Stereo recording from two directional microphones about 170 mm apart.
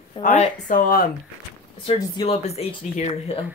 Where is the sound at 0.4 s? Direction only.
50° left (ahead or behind).